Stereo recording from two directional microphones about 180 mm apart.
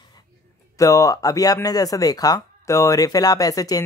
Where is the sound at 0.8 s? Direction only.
20° left (ahead or behind).